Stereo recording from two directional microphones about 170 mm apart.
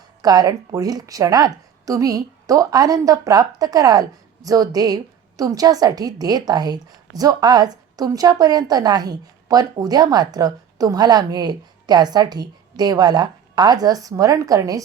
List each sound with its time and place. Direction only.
0.2 s a woman's voice: 20° right (ahead or behind)